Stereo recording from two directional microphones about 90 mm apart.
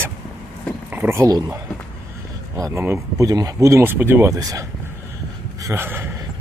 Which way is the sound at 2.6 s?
40° right (ahead or behind).